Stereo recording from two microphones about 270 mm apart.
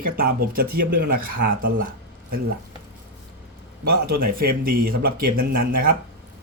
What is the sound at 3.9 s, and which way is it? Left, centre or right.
Speech, right.